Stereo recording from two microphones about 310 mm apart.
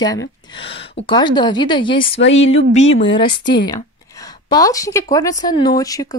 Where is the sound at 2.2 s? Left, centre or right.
Left.